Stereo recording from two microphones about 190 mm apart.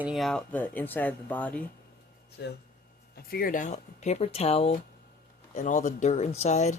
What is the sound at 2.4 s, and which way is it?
Speech, 60° left (ahead or behind).